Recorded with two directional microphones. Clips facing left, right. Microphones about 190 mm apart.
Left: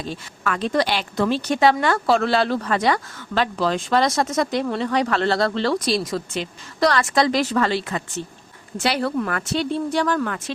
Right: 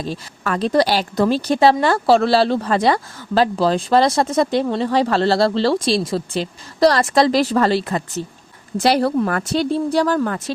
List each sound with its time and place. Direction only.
0.0 s speech: 35° right (ahead or behind)